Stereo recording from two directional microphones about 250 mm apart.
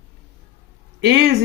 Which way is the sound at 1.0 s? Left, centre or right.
Right.